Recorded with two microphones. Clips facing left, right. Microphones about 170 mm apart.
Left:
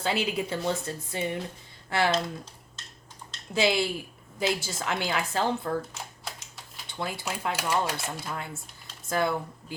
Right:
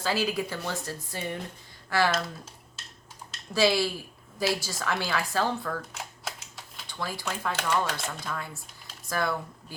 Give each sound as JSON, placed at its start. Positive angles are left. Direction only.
{"t": 0.0, "sound": "a woman's voice", "side_deg": 25}
{"t": 3.5, "sound": "a woman's voice", "side_deg": 20}
{"t": 7.0, "sound": "a woman's voice", "side_deg": 25}
{"t": 7.5, "sound": "speech", "side_deg": 10}
{"t": 8.3, "sound": "a woman's voice", "side_deg": 25}